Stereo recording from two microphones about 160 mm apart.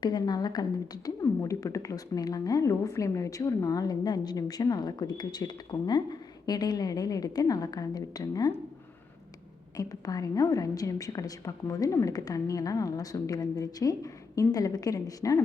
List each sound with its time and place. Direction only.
0.0 s a woman's voice: 25° left (ahead or behind)
9.7 s a woman's voice: 20° left (ahead or behind)